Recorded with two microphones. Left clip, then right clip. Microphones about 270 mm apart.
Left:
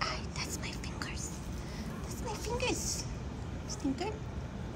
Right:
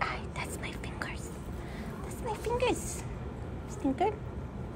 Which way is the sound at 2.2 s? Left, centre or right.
Centre.